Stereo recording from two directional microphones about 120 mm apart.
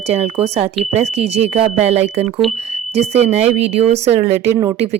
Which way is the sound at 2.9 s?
65° right (ahead or behind).